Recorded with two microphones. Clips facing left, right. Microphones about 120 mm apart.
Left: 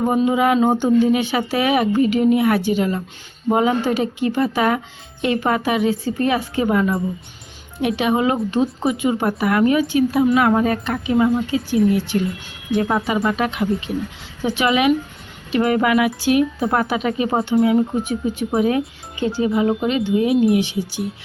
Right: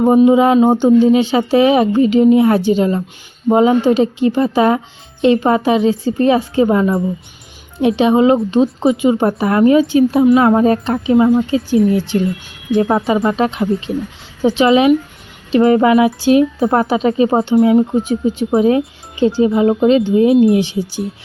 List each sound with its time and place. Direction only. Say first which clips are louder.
0.0 s a woman's voice: right 7 dB; 25° right (ahead or behind)